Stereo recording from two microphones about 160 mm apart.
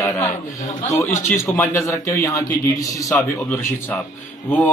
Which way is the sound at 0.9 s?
15° left (ahead or behind).